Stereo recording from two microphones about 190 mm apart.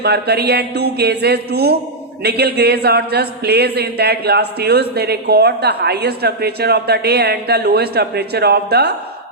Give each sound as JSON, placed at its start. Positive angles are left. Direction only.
{"t": 0.0, "sound": "speech", "side_deg": -60}